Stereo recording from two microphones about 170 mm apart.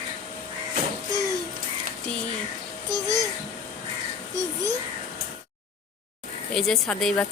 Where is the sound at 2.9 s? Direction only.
20° right (ahead or behind).